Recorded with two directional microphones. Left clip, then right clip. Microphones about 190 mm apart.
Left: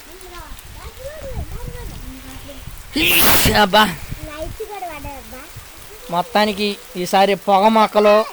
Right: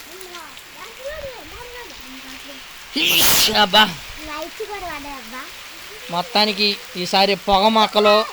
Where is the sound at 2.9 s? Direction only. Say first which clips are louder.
Left 1 dB; 30° left (ahead or behind).